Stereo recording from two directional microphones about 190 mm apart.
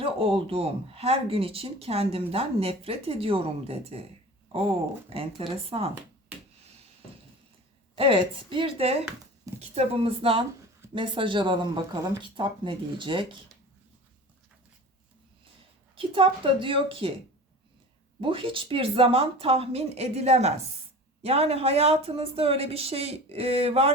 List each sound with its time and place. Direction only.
0.0 s speech: 30° right (ahead or behind)
7.9 s speech: 30° right (ahead or behind)
16.0 s speech: 30° right (ahead or behind)
18.2 s speech: 25° right (ahead or behind)